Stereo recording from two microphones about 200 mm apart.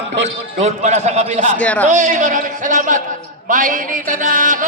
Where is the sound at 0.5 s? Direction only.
35° right (ahead or behind).